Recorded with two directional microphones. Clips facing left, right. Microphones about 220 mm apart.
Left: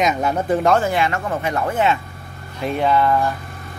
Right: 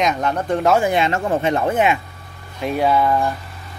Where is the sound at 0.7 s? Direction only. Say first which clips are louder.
Right 1 dB; 20° right (ahead or behind).